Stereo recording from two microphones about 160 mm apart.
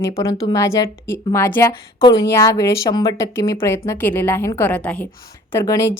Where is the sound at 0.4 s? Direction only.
20° left (ahead or behind).